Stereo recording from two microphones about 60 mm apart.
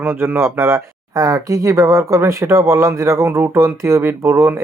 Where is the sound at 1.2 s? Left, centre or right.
Right.